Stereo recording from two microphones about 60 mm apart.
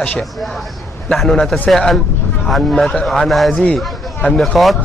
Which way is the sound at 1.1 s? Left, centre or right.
Centre.